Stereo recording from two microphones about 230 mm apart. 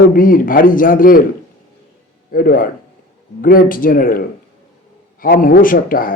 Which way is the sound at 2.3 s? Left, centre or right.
Left.